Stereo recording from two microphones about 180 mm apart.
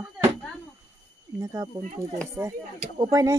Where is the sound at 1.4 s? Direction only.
20° right (ahead or behind).